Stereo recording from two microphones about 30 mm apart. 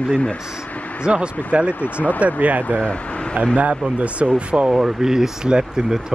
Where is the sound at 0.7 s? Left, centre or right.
Left.